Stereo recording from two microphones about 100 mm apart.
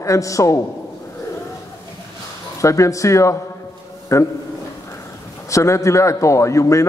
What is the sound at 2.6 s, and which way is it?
A man's voice, 30° left (ahead or behind).